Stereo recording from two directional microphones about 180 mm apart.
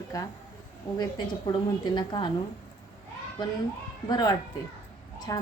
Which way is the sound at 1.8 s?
25° left (ahead or behind).